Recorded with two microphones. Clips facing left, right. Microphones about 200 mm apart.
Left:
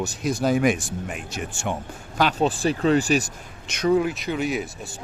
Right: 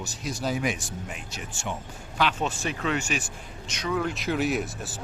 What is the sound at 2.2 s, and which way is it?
Speech, 40° left (ahead or behind).